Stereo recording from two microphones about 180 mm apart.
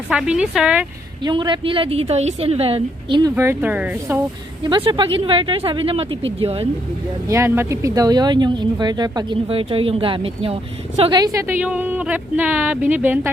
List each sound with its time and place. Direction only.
0.1 s speech: 5° right (ahead or behind)
1.2 s a woman's voice: 25° right (ahead or behind); by 4.2 s 10° right (ahead or behind)
4.6 s a woman's voice: 25° right (ahead or behind)
7.3 s speech: 15° right (ahead or behind)